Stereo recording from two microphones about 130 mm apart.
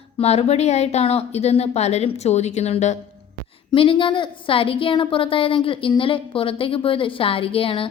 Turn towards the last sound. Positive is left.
turn(degrees=45)  # may be behind; listen again after turning